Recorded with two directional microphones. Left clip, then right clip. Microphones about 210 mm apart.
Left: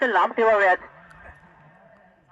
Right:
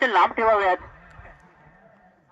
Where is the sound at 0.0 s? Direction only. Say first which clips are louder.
Right 1 dB; 55° left (ahead or behind).